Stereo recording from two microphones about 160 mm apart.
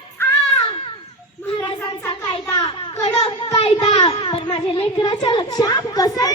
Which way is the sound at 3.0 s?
40° left (ahead or behind).